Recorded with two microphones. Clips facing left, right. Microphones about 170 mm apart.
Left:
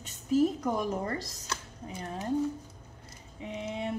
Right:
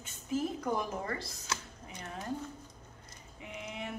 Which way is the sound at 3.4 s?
30° left (ahead or behind).